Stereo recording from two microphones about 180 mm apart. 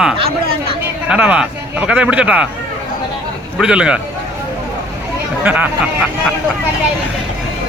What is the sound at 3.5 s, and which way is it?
Speech, 5° right (ahead or behind).